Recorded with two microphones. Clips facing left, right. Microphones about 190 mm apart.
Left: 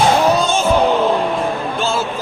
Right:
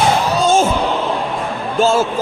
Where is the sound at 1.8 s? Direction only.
40° right (ahead or behind).